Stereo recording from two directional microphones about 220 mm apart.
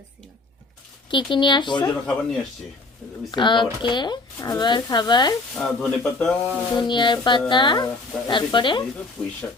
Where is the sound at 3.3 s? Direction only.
20° left (ahead or behind).